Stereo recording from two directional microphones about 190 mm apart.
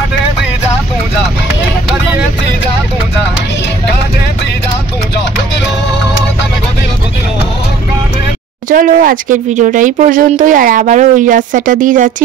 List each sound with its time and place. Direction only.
8.6 s speech: 45° right (ahead or behind)